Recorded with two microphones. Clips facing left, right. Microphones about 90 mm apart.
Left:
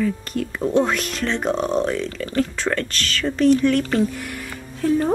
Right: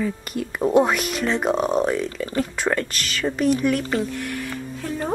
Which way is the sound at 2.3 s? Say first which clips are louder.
Left 1 dB; 10° right (ahead or behind).